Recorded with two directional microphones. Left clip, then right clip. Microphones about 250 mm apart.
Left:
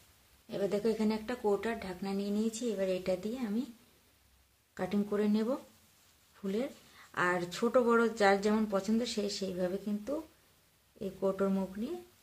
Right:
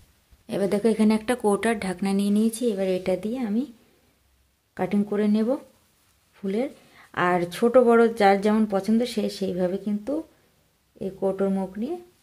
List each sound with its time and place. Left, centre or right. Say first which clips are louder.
0.5 s speech: right 9 dB; right
4.7 s a woman's voice: right 8 dB; right